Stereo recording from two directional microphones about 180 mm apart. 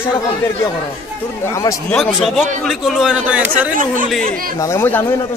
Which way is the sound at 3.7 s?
50° right (ahead or behind).